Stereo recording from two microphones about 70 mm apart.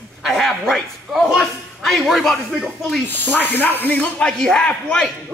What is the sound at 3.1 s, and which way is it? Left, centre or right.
Speech, left.